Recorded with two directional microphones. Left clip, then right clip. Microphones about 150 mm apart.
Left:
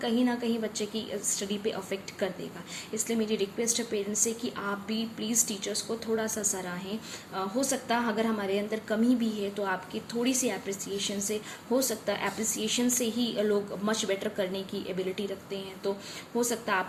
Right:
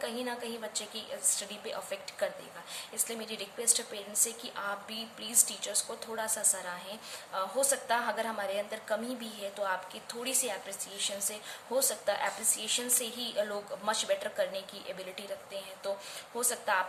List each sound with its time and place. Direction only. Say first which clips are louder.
0.0 s a woman's voice: left 7 dB; 25° right (ahead or behind)